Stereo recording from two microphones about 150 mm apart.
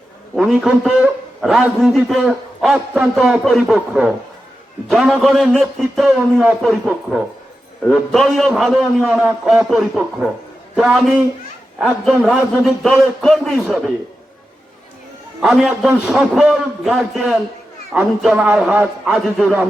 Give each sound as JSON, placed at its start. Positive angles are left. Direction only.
{"t": 0.3, "sound": "a man's voice", "side_deg": -5}
{"t": 15.4, "sound": "a man's voice", "side_deg": -5}